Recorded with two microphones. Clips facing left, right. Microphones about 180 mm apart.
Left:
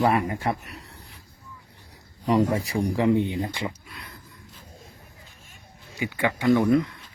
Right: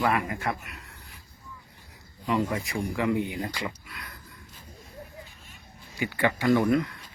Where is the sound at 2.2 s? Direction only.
40° left (ahead or behind).